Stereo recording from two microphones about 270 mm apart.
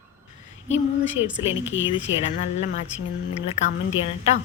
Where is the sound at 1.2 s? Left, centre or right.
Centre.